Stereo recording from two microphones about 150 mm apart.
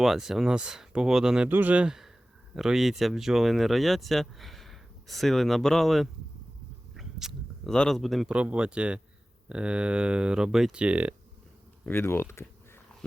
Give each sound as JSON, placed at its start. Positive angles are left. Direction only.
{"t": 0.0, "sound": "speech", "side_deg": 0}
{"t": 11.9, "sound": "speech", "side_deg": 15}